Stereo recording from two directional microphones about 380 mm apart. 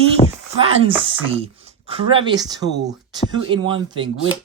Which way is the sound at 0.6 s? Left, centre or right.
Centre.